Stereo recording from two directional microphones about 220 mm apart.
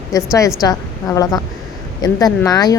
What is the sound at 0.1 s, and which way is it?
Speech, 15° left (ahead or behind).